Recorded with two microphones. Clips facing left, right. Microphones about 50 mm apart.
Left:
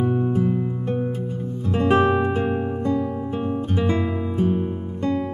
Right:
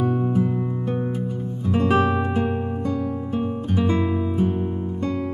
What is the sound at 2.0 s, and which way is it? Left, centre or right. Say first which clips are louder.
Music: left 2 dB; centre.